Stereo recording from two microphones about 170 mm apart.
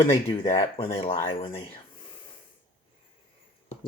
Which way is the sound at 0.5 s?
20° left (ahead or behind).